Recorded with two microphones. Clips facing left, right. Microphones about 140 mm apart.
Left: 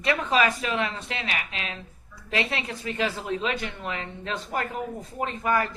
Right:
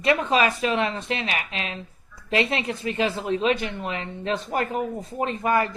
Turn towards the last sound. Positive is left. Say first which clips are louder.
# right 3 dB
turn(degrees=-25)  # may be behind; listen again after turning